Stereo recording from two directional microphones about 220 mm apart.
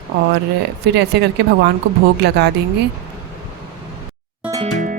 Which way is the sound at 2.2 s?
50° right (ahead or behind).